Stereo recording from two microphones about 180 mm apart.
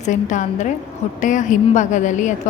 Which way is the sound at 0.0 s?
45° left (ahead or behind).